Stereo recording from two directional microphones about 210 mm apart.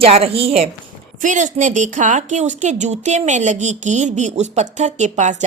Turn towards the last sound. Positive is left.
turn(degrees=-35)  # may be behind; listen again after turning